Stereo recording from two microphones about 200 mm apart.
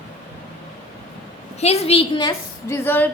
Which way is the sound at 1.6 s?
30° left (ahead or behind).